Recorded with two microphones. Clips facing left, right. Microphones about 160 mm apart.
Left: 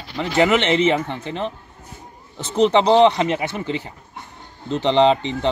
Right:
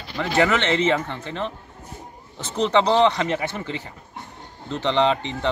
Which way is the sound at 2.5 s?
20° left (ahead or behind).